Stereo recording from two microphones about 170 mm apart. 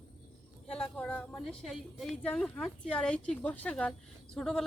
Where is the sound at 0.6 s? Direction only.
5° left (ahead or behind).